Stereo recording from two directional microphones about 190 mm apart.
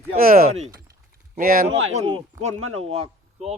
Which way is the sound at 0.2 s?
50° right (ahead or behind).